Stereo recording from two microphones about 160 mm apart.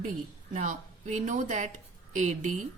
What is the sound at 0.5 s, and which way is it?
A woman's voice, 50° right (ahead or behind).